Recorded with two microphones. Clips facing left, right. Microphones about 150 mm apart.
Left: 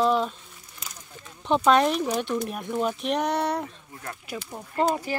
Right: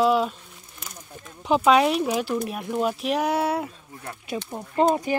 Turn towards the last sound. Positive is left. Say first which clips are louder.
# right 4 dB
turn(degrees=-20)  # may be behind; listen again after turning